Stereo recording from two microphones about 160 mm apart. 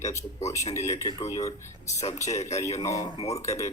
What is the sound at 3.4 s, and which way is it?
Speech, 20° left (ahead or behind).